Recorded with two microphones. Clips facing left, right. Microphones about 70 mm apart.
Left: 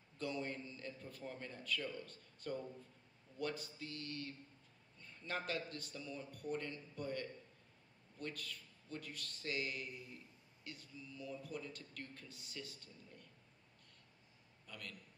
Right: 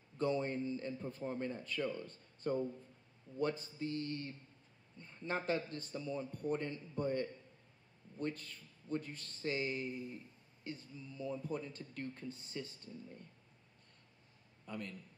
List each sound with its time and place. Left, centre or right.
0.2 s a man's voice: right
14.7 s a man's voice: right